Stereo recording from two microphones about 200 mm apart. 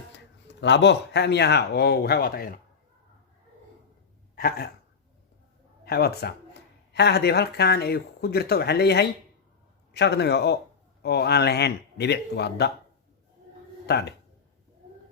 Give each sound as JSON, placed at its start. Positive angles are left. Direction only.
{"t": 0.6, "sound": "speech", "side_deg": 60}
{"t": 4.4, "sound": "speech", "side_deg": 50}
{"t": 5.8, "sound": "speech", "side_deg": 50}
{"t": 13.8, "sound": "speech", "side_deg": 55}